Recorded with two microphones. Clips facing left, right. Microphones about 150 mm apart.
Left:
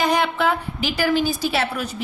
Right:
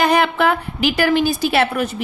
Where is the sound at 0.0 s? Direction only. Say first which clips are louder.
Right 4 dB; 65° right (ahead or behind).